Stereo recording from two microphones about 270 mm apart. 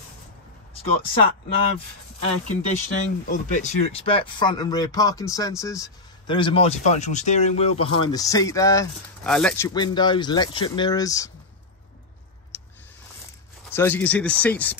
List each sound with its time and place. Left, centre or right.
2.5 s speech: left; by 9.7 s centre
9.8 s speech: centre
12.5 s a sound: centre
13.7 s speech: centre